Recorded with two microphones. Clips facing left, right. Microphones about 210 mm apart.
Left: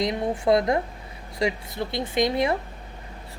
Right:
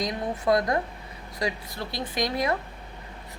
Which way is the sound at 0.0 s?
25° left (ahead or behind).